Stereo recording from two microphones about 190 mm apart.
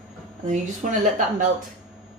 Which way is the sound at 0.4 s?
40° right (ahead or behind).